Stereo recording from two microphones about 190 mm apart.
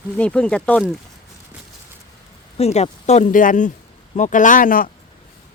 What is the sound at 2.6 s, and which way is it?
Speech, 35° left (ahead or behind).